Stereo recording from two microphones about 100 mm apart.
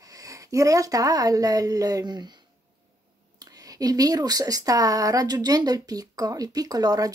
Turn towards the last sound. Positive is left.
turn(degrees=-40)  # may be behind; listen again after turning